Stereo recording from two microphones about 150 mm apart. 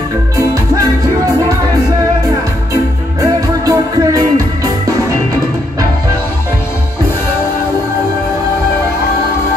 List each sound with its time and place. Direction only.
0.4 s music: 20° right (ahead or behind)
2.7 s music: 20° right (ahead or behind)